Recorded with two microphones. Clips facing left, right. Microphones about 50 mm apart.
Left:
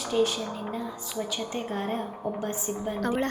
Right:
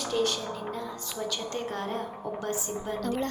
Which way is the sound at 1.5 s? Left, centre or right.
Centre.